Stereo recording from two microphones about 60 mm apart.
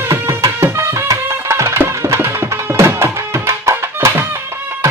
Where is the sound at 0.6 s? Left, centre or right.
Right.